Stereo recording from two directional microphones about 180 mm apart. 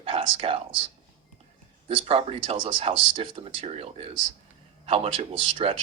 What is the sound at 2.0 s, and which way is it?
Speech, 30° right (ahead or behind).